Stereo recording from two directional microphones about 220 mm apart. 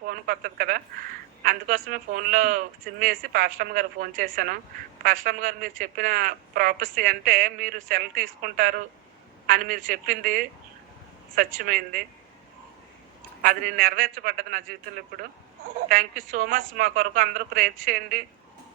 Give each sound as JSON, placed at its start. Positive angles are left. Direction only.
{"t": 0.1, "sound": "speech", "side_deg": -45}
{"t": 13.4, "sound": "speech", "side_deg": -40}
{"t": 16.3, "sound": "speech", "side_deg": -40}